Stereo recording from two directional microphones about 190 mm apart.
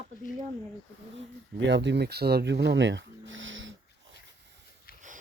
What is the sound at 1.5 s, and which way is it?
Speech, 70° right (ahead or behind).